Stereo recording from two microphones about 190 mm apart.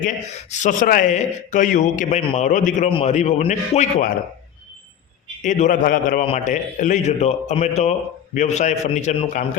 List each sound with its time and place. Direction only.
0.0 s a man's voice: 40° left (ahead or behind)
5.4 s a man's voice: 40° left (ahead or behind)